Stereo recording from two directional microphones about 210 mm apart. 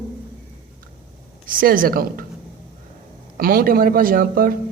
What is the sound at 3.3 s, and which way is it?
Speech, 45° right (ahead or behind).